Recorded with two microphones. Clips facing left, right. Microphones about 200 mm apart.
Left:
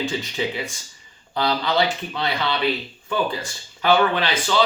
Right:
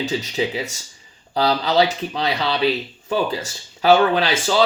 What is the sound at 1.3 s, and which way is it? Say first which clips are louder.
Speech: right 3 dB; 40° right (ahead or behind).